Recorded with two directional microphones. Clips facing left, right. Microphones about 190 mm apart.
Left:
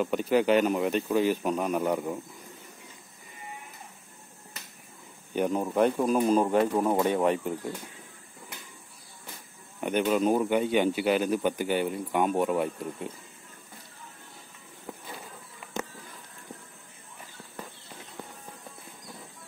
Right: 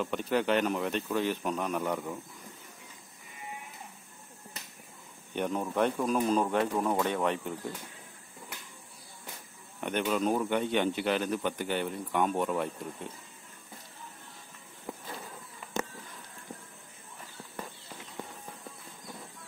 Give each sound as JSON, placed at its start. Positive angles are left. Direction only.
{"t": 0.0, "sound": "speech", "side_deg": 5}
{"t": 5.3, "sound": "speech", "side_deg": 5}
{"t": 6.8, "sound": "speech", "side_deg": 20}
{"t": 9.8, "sound": "speech", "side_deg": 5}